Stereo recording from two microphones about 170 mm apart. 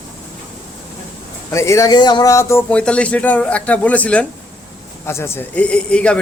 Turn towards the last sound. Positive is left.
turn(degrees=5)  # may be behind; listen again after turning